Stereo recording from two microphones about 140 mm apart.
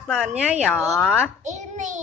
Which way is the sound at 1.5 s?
60° right (ahead or behind).